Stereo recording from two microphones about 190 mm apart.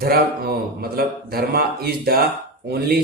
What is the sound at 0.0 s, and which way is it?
A man's voice, 55° right (ahead or behind).